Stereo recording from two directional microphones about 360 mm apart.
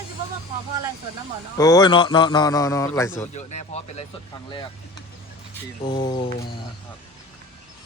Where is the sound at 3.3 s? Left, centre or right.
Centre.